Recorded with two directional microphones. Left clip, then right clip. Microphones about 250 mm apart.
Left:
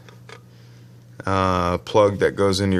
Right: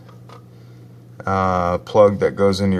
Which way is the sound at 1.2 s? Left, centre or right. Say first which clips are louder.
Right 2 dB; left.